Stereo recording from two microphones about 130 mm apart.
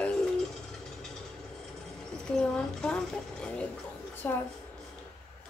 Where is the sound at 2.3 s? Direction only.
5° left (ahead or behind).